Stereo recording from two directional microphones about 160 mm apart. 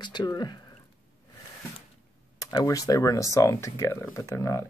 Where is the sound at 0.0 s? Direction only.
25° left (ahead or behind).